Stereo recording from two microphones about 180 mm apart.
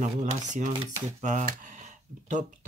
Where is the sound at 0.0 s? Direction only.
45° right (ahead or behind).